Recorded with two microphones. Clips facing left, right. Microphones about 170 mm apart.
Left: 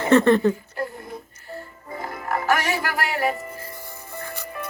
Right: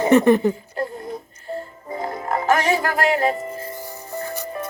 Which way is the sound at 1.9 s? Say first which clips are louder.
Right 3 dB; 25° right (ahead or behind).